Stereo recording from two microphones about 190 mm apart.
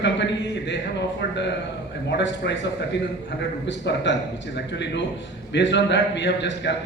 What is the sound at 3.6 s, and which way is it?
Speech, 70° left (ahead or behind).